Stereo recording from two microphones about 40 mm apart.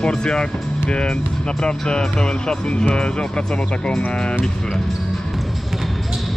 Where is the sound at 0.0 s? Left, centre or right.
Left.